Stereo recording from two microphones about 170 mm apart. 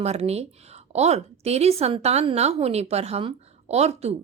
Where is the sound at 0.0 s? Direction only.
40° right (ahead or behind).